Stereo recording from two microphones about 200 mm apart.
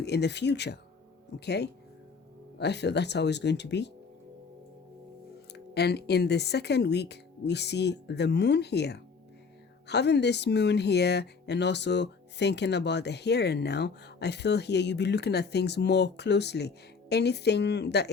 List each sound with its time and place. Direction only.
0.0 s speech: 55° left (ahead or behind)
5.7 s speech: 55° left (ahead or behind)